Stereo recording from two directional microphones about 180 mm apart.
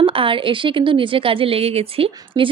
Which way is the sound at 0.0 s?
30° right (ahead or behind).